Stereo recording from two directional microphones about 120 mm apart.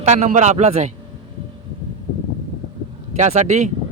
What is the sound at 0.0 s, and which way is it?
Speech, 75° right (ahead or behind).